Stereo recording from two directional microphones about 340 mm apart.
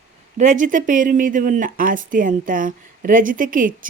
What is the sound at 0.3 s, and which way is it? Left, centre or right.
Speech, right.